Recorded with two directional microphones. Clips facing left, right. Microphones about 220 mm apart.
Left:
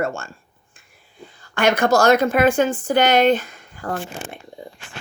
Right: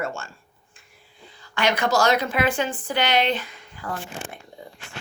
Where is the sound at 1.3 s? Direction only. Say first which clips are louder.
Left 5 dB; 50° left (ahead or behind).